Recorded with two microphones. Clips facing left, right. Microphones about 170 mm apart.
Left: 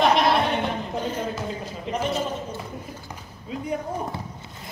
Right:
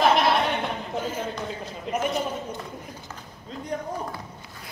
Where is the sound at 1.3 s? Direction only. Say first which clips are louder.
Left 2 dB; centre (ahead or behind).